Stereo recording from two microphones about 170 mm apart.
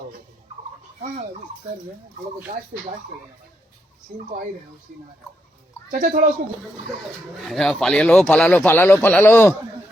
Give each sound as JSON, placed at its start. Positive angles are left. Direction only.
{"t": 4.1, "sound": "speech", "side_deg": -50}
{"t": 5.9, "sound": "speech", "side_deg": -50}
{"t": 7.4, "sound": "a man's voice", "side_deg": 0}